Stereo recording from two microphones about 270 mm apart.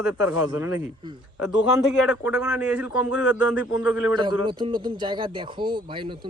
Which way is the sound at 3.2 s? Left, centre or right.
Left.